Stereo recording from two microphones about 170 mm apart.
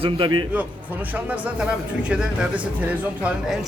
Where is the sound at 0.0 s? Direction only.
30° right (ahead or behind).